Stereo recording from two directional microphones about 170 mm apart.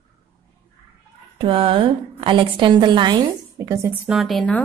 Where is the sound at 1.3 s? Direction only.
35° right (ahead or behind); by 3.9 s 15° right (ahead or behind).